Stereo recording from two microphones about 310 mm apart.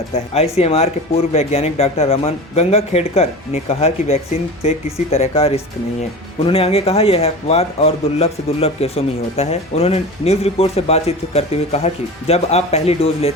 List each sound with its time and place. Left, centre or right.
0.1 s speech: centre